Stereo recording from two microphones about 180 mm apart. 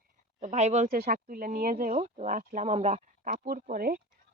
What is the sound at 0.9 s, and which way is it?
Speech, 55° right (ahead or behind).